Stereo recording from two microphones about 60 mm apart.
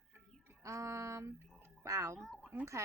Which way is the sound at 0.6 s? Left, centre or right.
Right.